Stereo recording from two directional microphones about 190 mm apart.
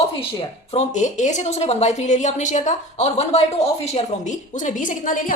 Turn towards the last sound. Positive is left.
turn(degrees=45)  # may be behind; listen again after turning